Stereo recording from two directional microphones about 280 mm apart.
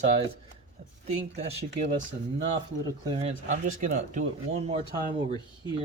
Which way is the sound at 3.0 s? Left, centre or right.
Centre.